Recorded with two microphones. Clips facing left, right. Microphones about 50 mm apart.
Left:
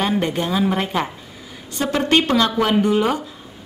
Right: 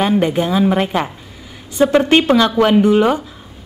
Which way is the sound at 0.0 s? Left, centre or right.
Centre.